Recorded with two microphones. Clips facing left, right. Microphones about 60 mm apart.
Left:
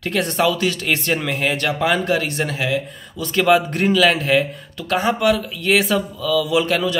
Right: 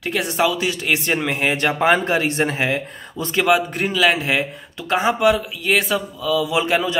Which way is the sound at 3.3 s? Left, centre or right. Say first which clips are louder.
Left 2 dB; centre.